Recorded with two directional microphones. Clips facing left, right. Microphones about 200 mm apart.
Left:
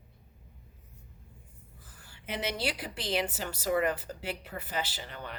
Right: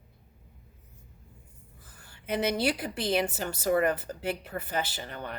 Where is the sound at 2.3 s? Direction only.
50° right (ahead or behind).